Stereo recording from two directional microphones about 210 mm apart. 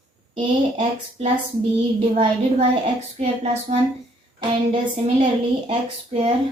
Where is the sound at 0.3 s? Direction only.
30° right (ahead or behind).